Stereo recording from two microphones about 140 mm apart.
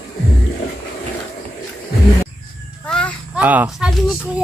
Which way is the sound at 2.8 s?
5° left (ahead or behind).